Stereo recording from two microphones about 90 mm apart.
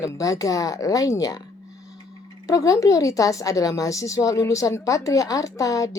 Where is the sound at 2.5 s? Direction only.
35° left (ahead or behind).